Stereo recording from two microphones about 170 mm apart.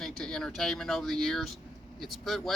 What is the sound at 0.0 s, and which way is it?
Speech, 5° left (ahead or behind).